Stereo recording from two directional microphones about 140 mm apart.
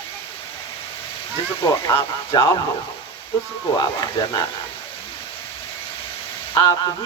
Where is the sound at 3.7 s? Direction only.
30° left (ahead or behind).